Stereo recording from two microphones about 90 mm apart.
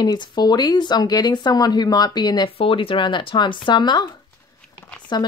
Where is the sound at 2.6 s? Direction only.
85° left; by 4.1 s 55° left (ahead or behind).